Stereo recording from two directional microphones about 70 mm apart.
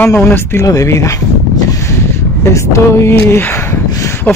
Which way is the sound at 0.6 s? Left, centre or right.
Left.